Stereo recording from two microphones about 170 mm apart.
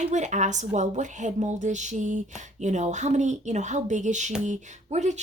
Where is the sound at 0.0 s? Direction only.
45° right (ahead or behind).